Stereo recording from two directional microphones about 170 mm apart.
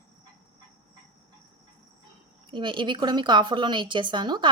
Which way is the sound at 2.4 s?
30° right (ahead or behind).